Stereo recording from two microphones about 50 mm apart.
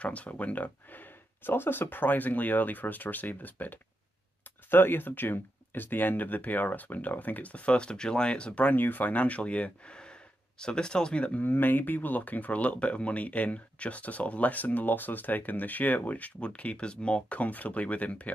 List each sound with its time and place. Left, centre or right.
0.0 s speech: left
8.7 s speech: left; by 11.2 s centre
11.2 s speech: left